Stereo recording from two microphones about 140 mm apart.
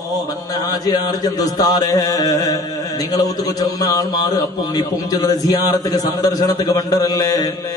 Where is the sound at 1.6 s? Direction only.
25° left (ahead or behind).